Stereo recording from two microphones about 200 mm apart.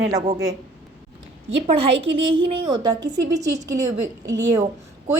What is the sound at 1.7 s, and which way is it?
A woman's voice, 25° right (ahead or behind).